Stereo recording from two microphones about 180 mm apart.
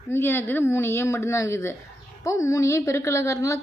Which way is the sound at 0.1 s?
15° left (ahead or behind).